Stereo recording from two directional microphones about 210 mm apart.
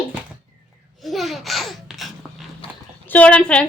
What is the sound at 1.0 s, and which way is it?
Babbling, centre (ahead or behind).